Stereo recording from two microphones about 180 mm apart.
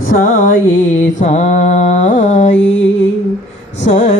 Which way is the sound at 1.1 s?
40° left (ahead or behind).